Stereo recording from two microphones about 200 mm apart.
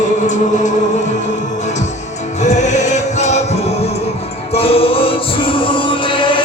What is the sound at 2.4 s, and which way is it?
Music, 35° left (ahead or behind).